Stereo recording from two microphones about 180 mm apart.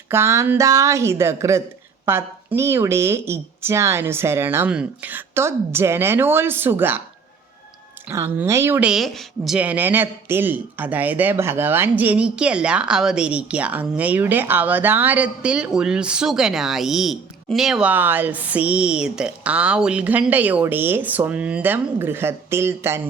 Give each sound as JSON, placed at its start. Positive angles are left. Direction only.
{"t": 0.1, "sound": "speech", "side_deg": -15}
{"t": 8.1, "sound": "speech", "side_deg": -15}